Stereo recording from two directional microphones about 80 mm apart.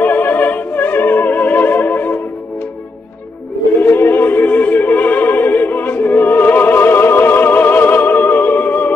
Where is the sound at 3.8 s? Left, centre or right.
Left.